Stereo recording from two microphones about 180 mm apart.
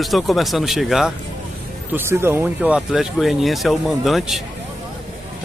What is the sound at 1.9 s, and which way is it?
Speech, 15° right (ahead or behind).